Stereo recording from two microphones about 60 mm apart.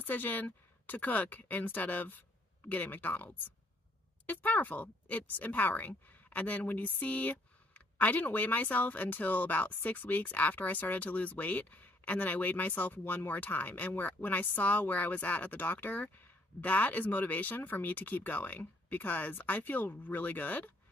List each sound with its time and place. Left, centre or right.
0.0 s speech: left